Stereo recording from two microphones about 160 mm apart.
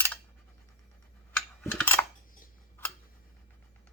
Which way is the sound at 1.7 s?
15° left (ahead or behind).